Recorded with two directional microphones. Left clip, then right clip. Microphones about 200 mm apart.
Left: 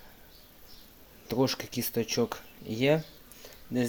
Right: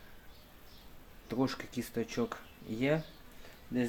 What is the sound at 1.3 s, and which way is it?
Speech, 35° left (ahead or behind).